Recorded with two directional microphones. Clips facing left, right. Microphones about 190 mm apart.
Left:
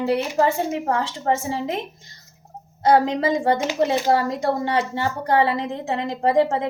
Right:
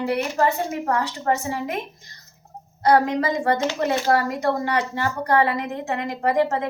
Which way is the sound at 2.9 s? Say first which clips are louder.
Left 1 dB; 25° left (ahead or behind).